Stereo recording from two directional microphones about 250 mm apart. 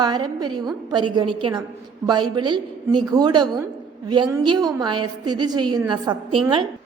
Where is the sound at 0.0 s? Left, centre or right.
Centre.